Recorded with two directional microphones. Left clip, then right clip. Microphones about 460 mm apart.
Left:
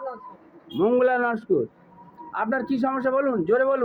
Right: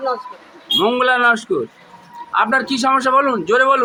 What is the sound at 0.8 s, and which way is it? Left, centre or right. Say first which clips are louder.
A man's voice: right 5 dB; left.